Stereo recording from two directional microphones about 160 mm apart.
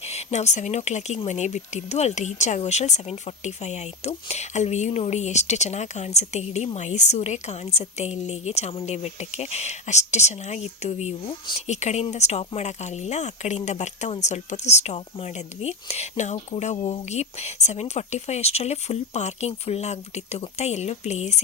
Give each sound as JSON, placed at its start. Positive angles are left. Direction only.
{"t": 0.0, "sound": "speech", "side_deg": 45}